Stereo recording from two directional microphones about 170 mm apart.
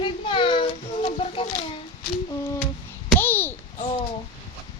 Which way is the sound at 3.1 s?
10° left (ahead or behind).